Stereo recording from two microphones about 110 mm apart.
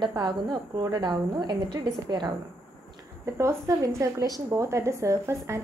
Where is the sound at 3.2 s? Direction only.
25° right (ahead or behind).